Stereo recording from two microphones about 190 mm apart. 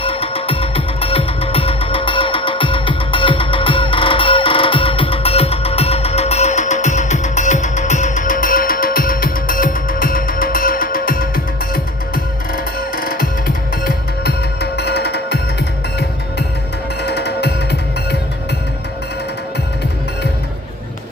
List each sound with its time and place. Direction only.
0.0 s music: 30° left (ahead or behind); by 15.4 s 60° left (ahead or behind)
17.0 s music: 60° left (ahead or behind)